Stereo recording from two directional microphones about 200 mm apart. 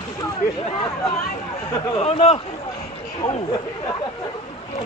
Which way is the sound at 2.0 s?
30° left (ahead or behind).